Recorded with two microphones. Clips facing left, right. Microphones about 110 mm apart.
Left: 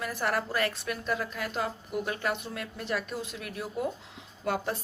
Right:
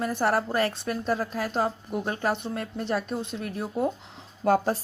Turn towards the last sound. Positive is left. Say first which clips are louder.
# right 8 dB
turn(degrees=-40)  # may be behind; listen again after turning